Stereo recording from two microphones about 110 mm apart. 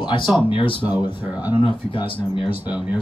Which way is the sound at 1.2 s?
15° right (ahead or behind).